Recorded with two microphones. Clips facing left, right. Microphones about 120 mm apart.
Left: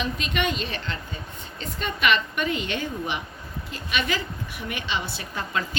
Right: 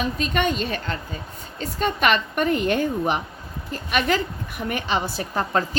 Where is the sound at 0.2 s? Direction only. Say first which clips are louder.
Right 4 dB; 40° right (ahead or behind).